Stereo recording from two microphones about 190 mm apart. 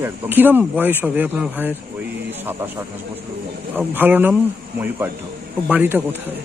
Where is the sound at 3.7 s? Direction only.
10° right (ahead or behind).